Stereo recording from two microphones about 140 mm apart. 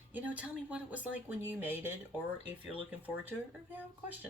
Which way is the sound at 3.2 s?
15° right (ahead or behind).